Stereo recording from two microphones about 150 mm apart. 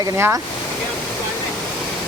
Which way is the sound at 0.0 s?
15° right (ahead or behind).